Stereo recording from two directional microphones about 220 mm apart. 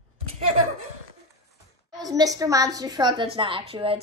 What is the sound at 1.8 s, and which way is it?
A woman's voice, 20° right (ahead or behind).